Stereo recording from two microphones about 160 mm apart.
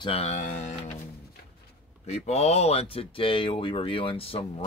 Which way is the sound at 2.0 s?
40° left (ahead or behind).